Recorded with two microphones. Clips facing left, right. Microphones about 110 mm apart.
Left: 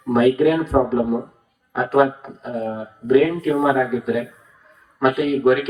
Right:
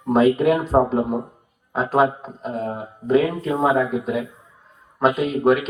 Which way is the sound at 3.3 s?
25° right (ahead or behind).